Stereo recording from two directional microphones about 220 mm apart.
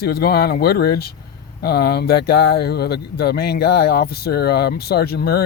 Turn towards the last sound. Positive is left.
turn(degrees=45)  # may be behind; listen again after turning